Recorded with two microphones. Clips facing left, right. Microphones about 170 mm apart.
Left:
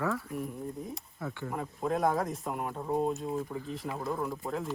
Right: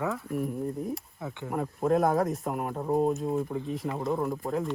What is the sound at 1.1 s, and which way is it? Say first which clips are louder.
Speech: right 2 dB; 20° right (ahead or behind).